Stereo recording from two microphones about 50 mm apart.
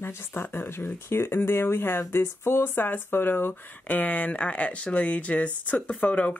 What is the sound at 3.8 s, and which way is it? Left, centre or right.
Speech, left.